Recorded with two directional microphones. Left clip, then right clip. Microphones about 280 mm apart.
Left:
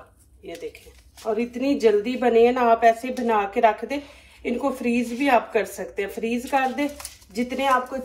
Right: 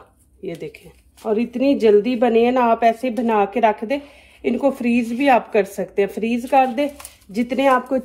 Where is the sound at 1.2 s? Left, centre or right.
Right.